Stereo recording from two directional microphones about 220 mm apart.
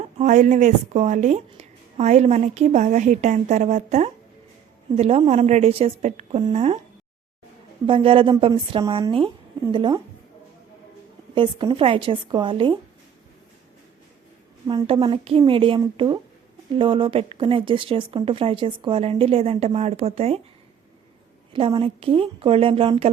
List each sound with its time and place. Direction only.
0.2 s a woman's voice: 35° right (ahead or behind)
7.9 s speech: 25° right (ahead or behind)
11.3 s speech: 20° right (ahead or behind)
14.7 s speech: 20° right (ahead or behind)
21.5 s speech: 25° right (ahead or behind)